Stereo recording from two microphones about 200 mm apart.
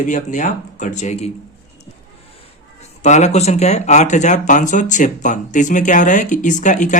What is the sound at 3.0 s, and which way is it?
Speech, 35° left (ahead or behind).